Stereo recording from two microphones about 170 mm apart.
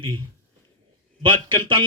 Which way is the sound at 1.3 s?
30° right (ahead or behind).